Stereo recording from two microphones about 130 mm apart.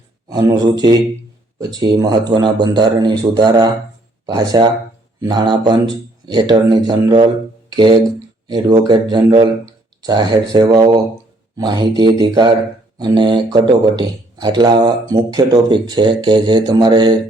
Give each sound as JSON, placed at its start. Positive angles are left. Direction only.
{"t": 0.3, "sound": "speech", "side_deg": -30}